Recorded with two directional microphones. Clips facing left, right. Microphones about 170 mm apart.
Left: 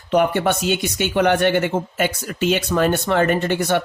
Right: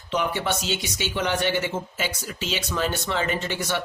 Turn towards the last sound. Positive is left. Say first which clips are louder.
# left 8 dB
turn(degrees=55)  # may be behind; listen again after turning